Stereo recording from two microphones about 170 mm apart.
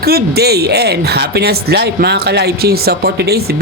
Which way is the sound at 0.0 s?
70° right (ahead or behind).